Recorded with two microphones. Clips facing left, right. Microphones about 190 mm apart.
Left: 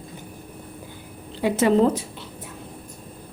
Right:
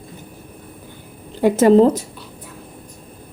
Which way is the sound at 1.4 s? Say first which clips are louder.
Right 7 dB; 45° right (ahead or behind).